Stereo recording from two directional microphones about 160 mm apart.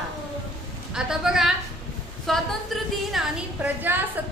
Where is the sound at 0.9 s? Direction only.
5° right (ahead or behind).